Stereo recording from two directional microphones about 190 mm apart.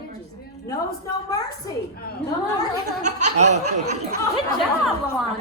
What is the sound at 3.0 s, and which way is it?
Laughter, 40° right (ahead or behind).